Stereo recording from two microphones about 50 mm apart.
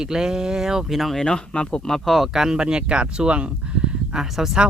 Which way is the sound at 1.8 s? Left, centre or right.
Centre.